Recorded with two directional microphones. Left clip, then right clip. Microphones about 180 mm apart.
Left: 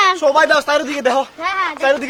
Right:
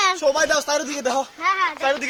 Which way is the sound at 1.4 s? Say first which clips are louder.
Left 3 dB; 60° left (ahead or behind).